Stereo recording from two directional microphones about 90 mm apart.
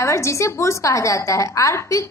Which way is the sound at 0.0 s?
35° left (ahead or behind).